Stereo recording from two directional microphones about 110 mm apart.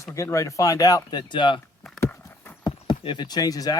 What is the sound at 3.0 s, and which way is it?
Speech, 45° left (ahead or behind).